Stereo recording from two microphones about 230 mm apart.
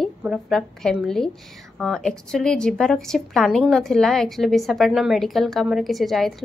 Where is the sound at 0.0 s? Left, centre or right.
Centre.